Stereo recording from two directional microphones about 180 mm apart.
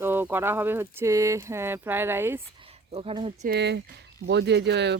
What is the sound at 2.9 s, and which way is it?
Speech, 30° right (ahead or behind).